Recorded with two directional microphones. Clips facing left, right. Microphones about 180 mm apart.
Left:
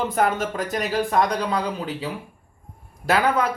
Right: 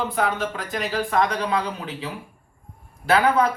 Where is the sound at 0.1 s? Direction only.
45° left (ahead or behind).